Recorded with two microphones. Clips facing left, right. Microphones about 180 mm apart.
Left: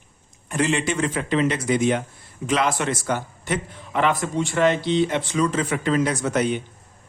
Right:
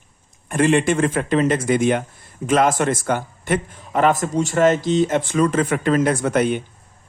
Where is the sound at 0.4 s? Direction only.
50° right (ahead or behind).